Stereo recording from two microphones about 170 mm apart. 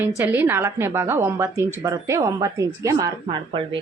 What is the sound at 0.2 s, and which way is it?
A woman's voice, 10° right (ahead or behind).